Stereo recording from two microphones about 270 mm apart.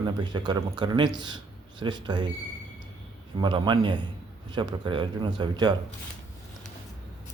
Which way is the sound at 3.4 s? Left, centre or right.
Centre.